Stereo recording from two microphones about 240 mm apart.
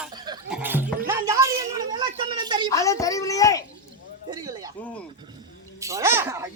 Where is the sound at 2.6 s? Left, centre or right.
Centre.